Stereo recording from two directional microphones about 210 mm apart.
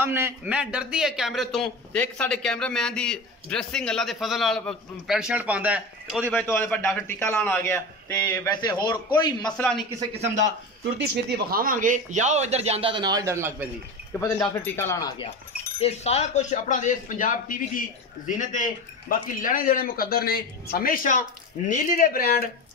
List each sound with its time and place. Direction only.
0.0 s a man's voice: 10° right (ahead or behind)
6.3 s a man's voice: 10° left (ahead or behind)
9.4 s a man's voice: 5° left (ahead or behind)
10.1 s speech: 30° right (ahead or behind)
11.2 s speech: 50° right (ahead or behind); by 13.7 s 10° right (ahead or behind)
14.2 s a man's voice: 10° left (ahead or behind)
15.8 s speech: 30° left (ahead or behind)